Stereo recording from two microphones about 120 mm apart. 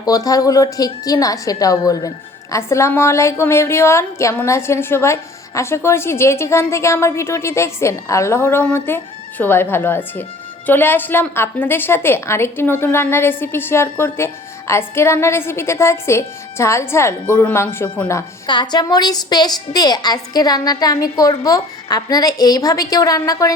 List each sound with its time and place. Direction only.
0.0 s a woman's voice: 30° left (ahead or behind)
18.4 s a woman's voice: 40° left (ahead or behind)